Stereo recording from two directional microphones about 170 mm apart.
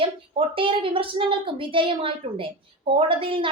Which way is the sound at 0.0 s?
30° right (ahead or behind).